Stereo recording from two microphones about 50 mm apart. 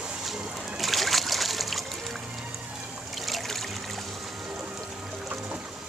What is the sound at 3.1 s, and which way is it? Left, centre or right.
Trickle, centre.